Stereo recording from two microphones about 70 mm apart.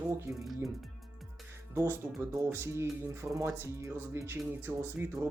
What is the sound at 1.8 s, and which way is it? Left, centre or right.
Speech, right.